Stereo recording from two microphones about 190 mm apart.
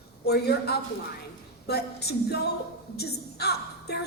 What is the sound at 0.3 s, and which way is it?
A woman's voice, 60° left (ahead or behind).